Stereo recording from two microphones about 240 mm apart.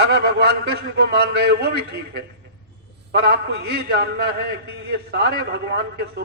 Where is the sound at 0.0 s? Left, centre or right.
Right.